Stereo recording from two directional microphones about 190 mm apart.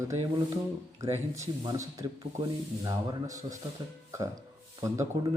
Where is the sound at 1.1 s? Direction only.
15° right (ahead or behind).